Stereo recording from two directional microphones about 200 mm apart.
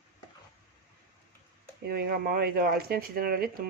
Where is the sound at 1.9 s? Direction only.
50° right (ahead or behind).